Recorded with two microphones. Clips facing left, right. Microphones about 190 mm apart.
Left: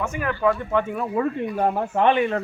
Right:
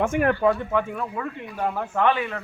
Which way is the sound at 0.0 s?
50° right (ahead or behind).